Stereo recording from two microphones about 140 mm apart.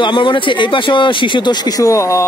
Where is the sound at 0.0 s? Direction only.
35° left (ahead or behind).